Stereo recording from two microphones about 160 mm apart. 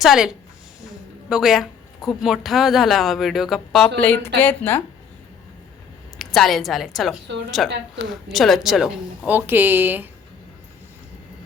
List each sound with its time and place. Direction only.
0.0 s a woman's voice: centre (ahead or behind)
1.3 s a woman's voice: centre (ahead or behind)
6.1 s a woman's voice: centre (ahead or behind)